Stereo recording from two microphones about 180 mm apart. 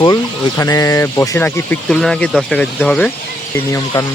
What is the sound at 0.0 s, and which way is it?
Speech, 20° left (ahead or behind).